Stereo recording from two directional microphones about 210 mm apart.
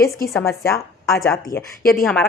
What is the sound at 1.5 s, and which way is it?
Speech, 50° left (ahead or behind).